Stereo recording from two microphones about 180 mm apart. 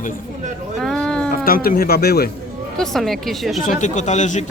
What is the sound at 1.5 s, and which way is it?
Speech, 55° left (ahead or behind).